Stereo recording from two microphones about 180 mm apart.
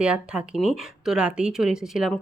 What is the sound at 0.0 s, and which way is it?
Speech, 5° right (ahead or behind).